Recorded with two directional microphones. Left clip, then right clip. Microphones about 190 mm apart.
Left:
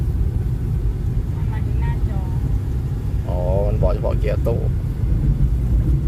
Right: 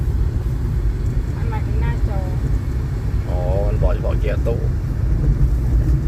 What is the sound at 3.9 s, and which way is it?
Vehicle, 45° left (ahead or behind).